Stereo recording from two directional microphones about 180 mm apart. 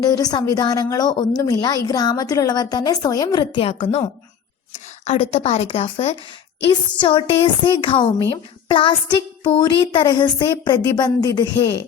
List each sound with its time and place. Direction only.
0.0 s a woman's voice: 20° left (ahead or behind)